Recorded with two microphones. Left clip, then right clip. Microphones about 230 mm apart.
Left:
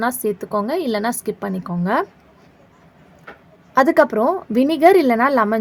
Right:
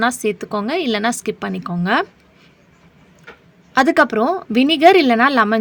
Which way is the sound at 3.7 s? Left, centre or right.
Right.